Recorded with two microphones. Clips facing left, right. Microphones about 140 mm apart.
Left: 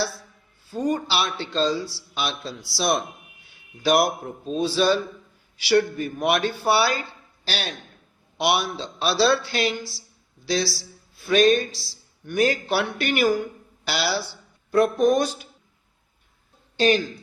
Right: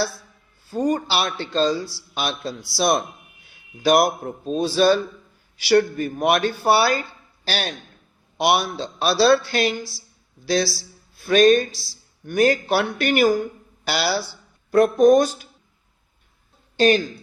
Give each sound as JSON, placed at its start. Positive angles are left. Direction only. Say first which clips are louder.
{"t": 0.7, "sound": "a man's voice", "louder": "right 3 dB", "side_deg": -45}
{"t": 16.7, "sound": "speech", "louder": "right 3 dB", "side_deg": -45}